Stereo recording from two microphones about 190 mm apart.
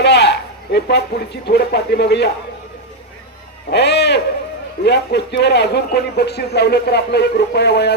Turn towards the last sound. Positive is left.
turn(degrees=60)  # may be behind; listen again after turning